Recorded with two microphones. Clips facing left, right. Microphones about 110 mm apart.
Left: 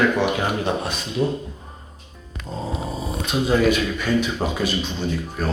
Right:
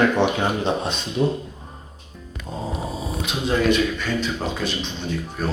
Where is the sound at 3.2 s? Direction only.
5° left (ahead or behind).